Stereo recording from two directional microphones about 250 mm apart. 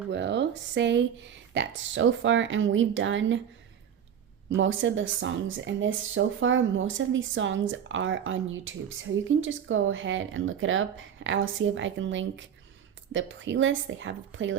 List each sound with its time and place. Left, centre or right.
0.1 s speech: right
4.4 s speech: right